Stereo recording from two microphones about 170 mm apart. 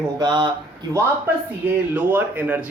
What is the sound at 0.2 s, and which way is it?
Speech, 25° right (ahead or behind).